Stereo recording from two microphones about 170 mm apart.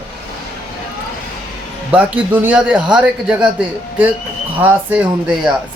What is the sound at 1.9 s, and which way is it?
A man's voice, 10° right (ahead or behind).